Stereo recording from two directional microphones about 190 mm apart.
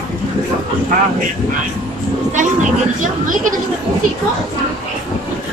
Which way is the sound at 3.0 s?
45° right (ahead or behind).